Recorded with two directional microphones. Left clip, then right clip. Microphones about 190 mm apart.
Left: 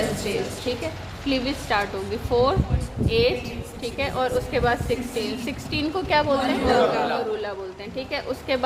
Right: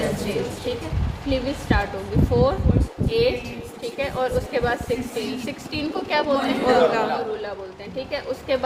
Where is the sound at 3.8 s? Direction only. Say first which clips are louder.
Even; 35° left (ahead or behind).